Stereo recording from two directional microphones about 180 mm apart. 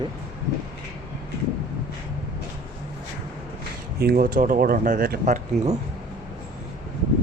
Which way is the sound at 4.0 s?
55° right (ahead or behind).